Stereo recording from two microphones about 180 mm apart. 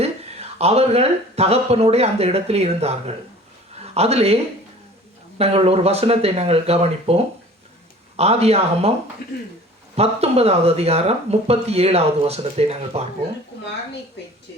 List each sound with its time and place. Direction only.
0.0 s a man's voice: 35° right (ahead or behind)
5.4 s speech: 35° right (ahead or behind)